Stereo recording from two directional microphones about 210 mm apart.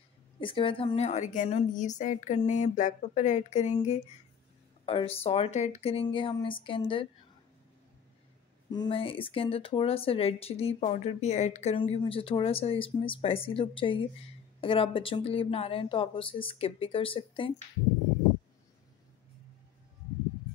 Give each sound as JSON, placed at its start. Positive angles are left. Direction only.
{"t": 0.4, "sound": "a woman's voice", "side_deg": 25}
{"t": 8.6, "sound": "speech", "side_deg": 20}